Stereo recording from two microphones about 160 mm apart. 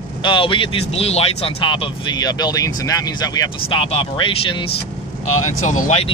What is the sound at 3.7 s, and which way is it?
Speech, 35° left (ahead or behind).